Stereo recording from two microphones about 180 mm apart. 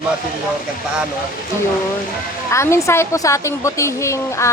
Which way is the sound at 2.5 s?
15° left (ahead or behind).